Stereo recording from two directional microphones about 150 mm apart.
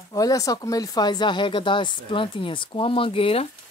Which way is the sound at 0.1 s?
25° left (ahead or behind).